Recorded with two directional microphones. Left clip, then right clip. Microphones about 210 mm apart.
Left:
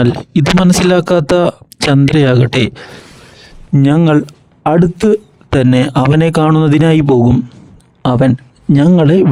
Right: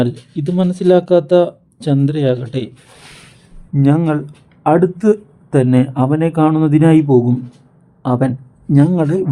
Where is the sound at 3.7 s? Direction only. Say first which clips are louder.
Left 5 dB; 40° left (ahead or behind).